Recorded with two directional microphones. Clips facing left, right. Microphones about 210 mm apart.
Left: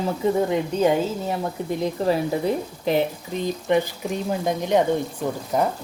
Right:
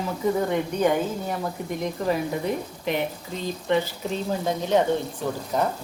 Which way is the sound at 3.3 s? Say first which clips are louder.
Left 3 dB; 15° left (ahead or behind).